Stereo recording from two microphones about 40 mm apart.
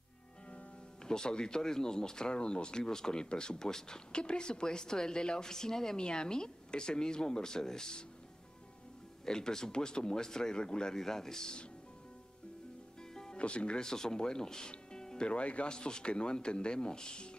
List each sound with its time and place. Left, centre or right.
1.0 s speech: centre
9.2 s speech: centre
13.1 s music: centre
13.4 s speech: left
13.7 s speech: centre